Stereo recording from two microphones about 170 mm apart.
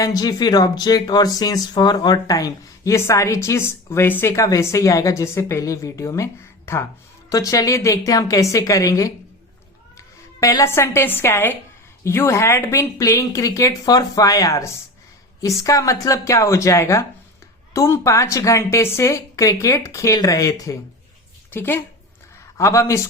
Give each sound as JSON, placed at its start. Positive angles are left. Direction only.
{"t": 0.0, "sound": "speech", "side_deg": 20}
{"t": 7.3, "sound": "a woman's voice", "side_deg": 20}